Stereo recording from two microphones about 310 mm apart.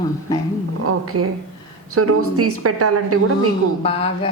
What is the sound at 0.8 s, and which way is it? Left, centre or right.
A woman's voice, right.